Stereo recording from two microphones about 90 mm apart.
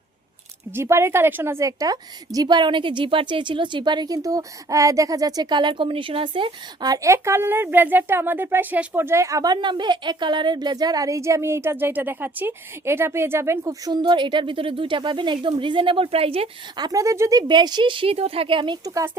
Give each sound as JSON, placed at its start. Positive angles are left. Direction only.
{"t": 0.7, "sound": "a woman's voice", "side_deg": -30}
{"t": 6.8, "sound": "a woman's voice", "side_deg": -40}
{"t": 14.0, "sound": "speech", "side_deg": -65}
{"t": 16.7, "sound": "a woman's voice", "side_deg": -50}
{"t": 17.0, "sound": "a woman's voice", "side_deg": -35}
{"t": 17.5, "sound": "speech", "side_deg": -55}